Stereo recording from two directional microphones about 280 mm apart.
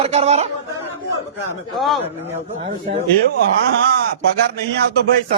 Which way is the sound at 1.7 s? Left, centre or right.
Centre.